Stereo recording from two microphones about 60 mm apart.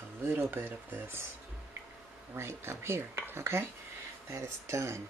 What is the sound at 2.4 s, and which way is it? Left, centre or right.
Speech, right.